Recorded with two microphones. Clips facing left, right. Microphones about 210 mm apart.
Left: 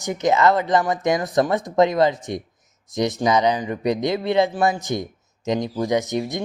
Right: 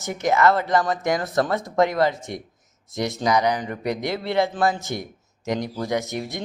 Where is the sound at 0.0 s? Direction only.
20° left (ahead or behind).